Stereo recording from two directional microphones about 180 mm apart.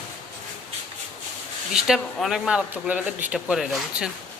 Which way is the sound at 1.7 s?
Centre (ahead or behind).